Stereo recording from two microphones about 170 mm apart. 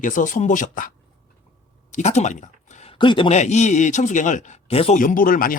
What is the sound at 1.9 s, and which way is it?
Speech, 45° left (ahead or behind).